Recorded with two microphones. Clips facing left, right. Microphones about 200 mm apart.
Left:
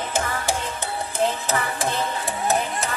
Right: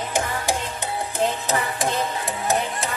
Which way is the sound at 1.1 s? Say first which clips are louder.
Even; 15° right (ahead or behind).